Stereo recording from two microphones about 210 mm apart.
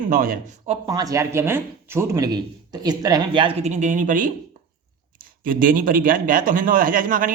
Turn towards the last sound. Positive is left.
turn(degrees=-40)  # may be behind; listen again after turning